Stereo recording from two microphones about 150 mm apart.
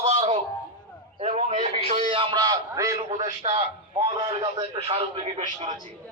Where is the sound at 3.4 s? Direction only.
50° right (ahead or behind).